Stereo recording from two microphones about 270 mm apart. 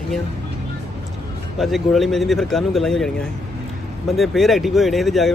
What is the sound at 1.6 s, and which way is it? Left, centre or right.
Speech, centre.